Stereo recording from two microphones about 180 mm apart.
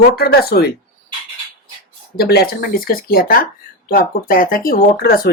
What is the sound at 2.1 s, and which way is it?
Speech, 60° left (ahead or behind).